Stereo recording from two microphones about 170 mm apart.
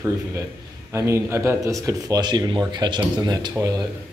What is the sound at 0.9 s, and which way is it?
Speech, 15° right (ahead or behind).